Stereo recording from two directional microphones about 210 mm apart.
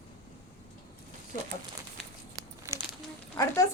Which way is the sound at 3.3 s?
15° left (ahead or behind).